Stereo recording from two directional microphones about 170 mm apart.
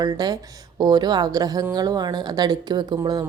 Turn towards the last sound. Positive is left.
turn(degrees=-25)  # may be behind; listen again after turning